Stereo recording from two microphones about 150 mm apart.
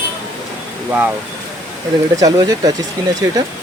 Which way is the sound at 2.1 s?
25° right (ahead or behind).